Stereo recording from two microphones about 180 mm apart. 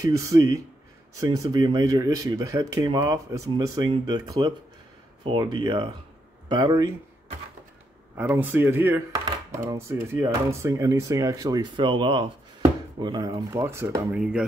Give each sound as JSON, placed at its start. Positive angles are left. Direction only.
{"t": 0.0, "sound": "speech", "side_deg": -20}
{"t": 8.2, "sound": "speech", "side_deg": -10}